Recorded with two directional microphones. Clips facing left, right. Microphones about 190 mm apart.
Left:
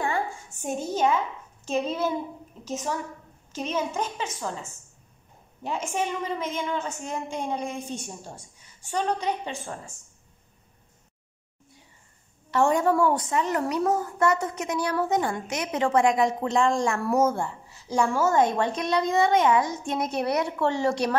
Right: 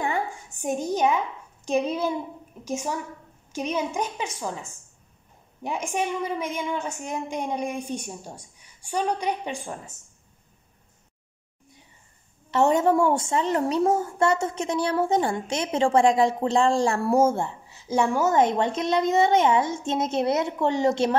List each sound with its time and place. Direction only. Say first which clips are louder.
0.0 s a sound: right 1 dB; 15° right (ahead or behind)
1.7 s a woman's voice: right 2 dB; 15° right (ahead or behind)
12.4 s a woman's voice: right 2 dB; 20° right (ahead or behind)